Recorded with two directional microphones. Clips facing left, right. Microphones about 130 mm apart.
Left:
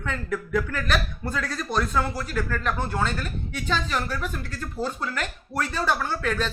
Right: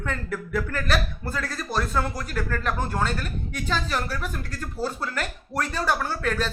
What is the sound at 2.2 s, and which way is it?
Speech, 45° right (ahead or behind).